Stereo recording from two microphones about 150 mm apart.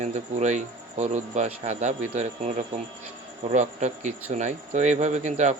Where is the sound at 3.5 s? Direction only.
55° right (ahead or behind).